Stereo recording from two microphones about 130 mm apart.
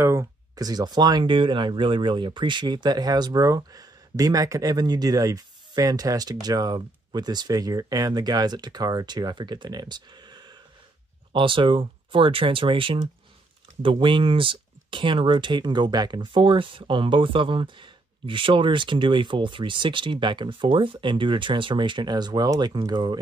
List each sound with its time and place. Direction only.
0.0 s speech: 25° right (ahead or behind)